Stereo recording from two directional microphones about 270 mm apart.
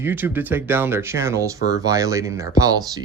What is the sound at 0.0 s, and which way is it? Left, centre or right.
Speech, centre.